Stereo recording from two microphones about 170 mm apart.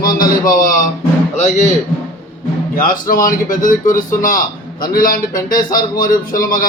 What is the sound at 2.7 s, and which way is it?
Speech, 55° left (ahead or behind).